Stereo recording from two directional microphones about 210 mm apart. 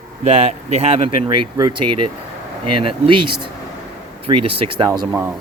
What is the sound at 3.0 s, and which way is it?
Speech, 25° right (ahead or behind).